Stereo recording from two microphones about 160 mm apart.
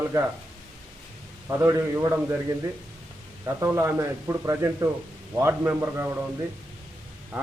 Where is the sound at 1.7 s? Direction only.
15° right (ahead or behind).